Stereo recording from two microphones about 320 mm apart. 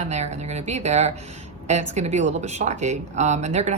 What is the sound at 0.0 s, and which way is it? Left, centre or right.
Speech, right.